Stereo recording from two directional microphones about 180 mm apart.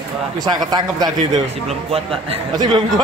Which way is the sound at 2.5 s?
25° right (ahead or behind).